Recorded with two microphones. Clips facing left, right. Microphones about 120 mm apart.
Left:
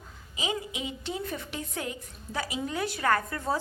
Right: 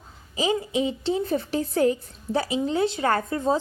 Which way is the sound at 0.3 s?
35° right (ahead or behind).